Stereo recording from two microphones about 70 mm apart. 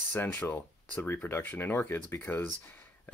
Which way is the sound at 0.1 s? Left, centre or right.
Left.